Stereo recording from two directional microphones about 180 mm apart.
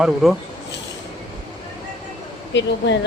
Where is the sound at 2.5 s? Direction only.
80° left.